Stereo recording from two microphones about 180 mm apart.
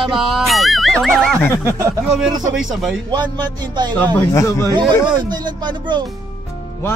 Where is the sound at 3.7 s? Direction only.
25° right (ahead or behind).